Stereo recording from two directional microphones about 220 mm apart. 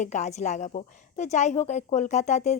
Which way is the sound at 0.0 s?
30° left (ahead or behind).